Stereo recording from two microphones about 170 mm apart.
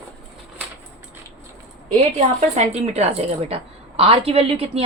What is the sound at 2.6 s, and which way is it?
A woman's voice, 40° right (ahead or behind).